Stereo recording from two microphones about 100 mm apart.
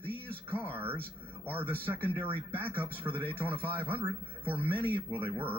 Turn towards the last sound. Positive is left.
turn(degrees=-60)  # may be behind; listen again after turning